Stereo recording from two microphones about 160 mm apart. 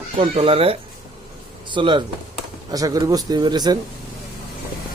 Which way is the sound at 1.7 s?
30° right (ahead or behind).